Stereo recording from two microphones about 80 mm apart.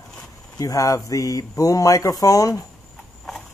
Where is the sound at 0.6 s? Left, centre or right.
Left.